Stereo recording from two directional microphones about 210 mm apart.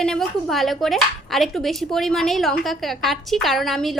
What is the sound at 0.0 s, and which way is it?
Speech, centre (ahead or behind).